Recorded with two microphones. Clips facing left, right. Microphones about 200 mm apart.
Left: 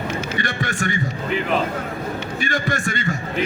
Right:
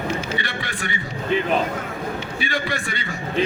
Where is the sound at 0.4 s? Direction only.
45° left (ahead or behind).